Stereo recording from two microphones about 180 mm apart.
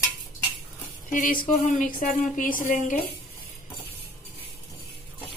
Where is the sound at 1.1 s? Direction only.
50° left (ahead or behind).